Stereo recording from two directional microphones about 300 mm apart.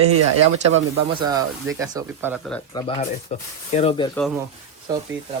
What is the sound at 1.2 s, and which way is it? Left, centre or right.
Speech, centre.